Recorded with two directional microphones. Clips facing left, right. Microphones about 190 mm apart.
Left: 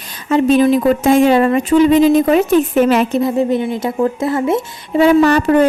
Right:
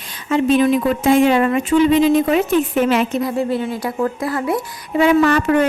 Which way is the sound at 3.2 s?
20° left (ahead or behind).